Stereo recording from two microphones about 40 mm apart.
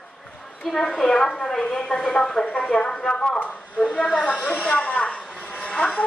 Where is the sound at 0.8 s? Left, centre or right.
Centre.